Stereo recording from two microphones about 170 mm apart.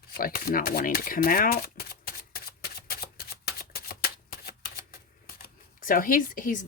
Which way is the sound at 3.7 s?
65° left (ahead or behind).